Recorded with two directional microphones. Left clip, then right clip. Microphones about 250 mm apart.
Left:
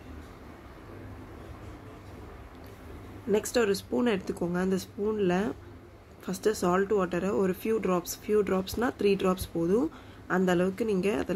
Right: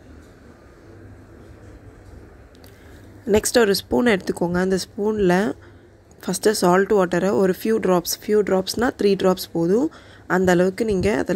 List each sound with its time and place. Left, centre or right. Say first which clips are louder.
3.3 s speech: right 9 dB; right